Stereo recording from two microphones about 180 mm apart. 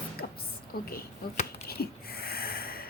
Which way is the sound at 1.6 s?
60° left (ahead or behind).